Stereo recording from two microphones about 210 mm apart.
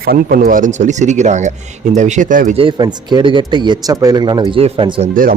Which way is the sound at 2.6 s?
20° right (ahead or behind).